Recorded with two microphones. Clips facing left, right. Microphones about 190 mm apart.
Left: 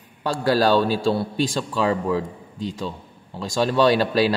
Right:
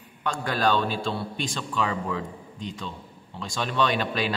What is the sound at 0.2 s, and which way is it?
A man's voice, 35° left (ahead or behind).